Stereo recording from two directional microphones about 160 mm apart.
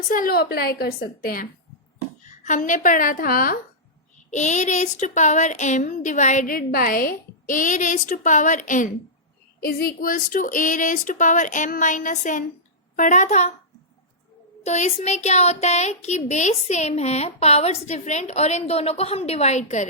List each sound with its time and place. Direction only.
0.1 s a woman's voice: 65° left (ahead or behind)
2.4 s a woman's voice: 50° left (ahead or behind)
4.3 s speech: 45° left (ahead or behind)
9.6 s speech: 70° left (ahead or behind); by 13.5 s 45° left (ahead or behind)
14.6 s speech: 45° left (ahead or behind)